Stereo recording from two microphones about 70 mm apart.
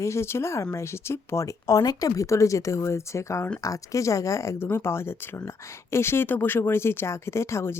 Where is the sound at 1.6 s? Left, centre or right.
Left.